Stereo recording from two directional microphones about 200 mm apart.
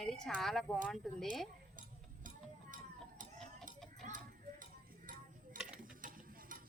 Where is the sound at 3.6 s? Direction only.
40° right (ahead or behind).